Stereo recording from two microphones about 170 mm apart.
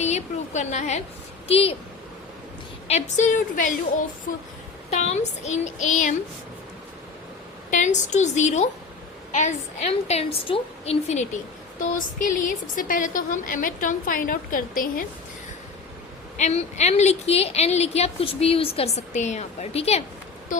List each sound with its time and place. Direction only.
0.0 s a woman's voice: 40° left (ahead or behind)
2.8 s a woman's voice: 40° left (ahead or behind)
4.9 s a woman's voice: 40° left (ahead or behind)
7.7 s a woman's voice: 45° left (ahead or behind)
16.4 s a woman's voice: 40° left (ahead or behind)